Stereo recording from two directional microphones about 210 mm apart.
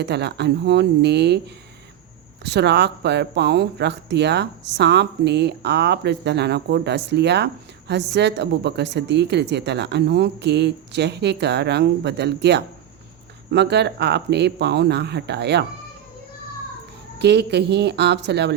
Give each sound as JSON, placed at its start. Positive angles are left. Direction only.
{"t": 0.0, "sound": "speech", "side_deg": -55}
{"t": 2.4, "sound": "speech", "side_deg": -55}
{"t": 17.2, "sound": "speech", "side_deg": -55}